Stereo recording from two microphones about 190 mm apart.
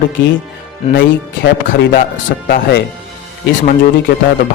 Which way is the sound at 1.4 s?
55° left (ahead or behind).